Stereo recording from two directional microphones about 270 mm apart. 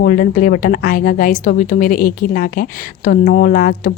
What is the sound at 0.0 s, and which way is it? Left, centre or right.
Speech, left.